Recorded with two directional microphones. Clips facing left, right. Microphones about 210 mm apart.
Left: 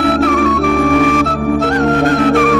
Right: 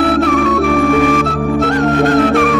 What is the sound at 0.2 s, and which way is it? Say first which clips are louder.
Music: even; centre (ahead or behind).